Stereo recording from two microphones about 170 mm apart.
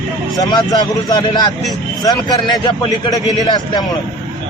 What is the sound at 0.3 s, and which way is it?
A man's voice, 25° left (ahead or behind).